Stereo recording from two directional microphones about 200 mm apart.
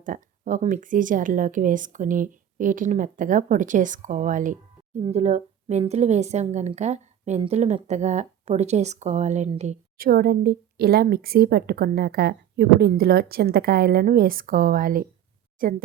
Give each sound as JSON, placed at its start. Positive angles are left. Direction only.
{"t": 0.0, "sound": "a woman's voice", "side_deg": -40}